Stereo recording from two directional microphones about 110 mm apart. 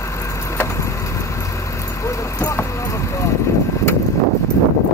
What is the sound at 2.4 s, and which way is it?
Vehicle, 30° left (ahead or behind).